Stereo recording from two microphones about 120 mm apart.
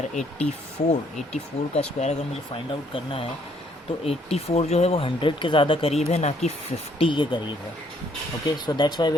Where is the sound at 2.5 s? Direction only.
50° left (ahead or behind).